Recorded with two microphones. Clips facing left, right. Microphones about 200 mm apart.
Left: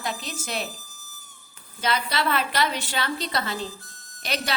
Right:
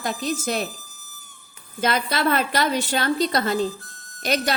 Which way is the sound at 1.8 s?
50° right (ahead or behind).